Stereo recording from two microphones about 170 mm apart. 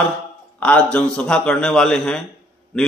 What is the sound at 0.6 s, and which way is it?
A man's voice, 5° left (ahead or behind).